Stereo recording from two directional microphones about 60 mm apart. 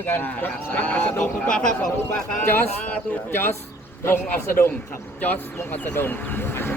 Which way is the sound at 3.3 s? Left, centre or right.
Left.